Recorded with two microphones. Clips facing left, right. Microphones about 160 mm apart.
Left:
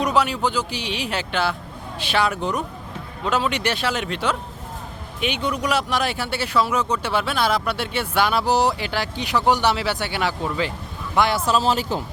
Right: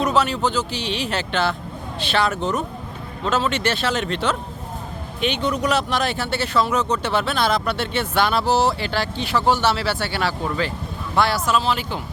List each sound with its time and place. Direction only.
0.0 s speech: 10° left (ahead or behind)
11.4 s speech: 35° left (ahead or behind)